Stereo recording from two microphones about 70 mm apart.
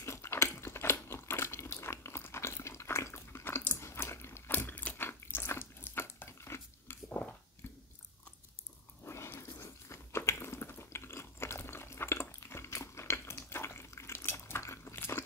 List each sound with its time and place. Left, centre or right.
0.0 s a sound: left
4.5 s biting: left
9.0 s dog: left
9.4 s biting: left